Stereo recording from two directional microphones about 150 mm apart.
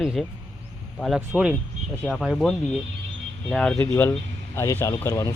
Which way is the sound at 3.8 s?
15° left (ahead or behind).